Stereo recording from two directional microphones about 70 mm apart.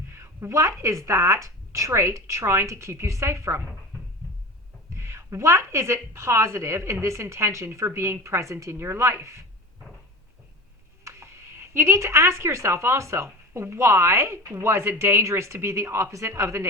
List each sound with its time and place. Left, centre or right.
0.1 s speech: right
4.9 s speech: right
11.0 s speech: right